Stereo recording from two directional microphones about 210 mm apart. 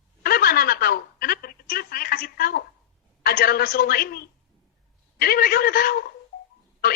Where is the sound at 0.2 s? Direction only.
45° left (ahead or behind).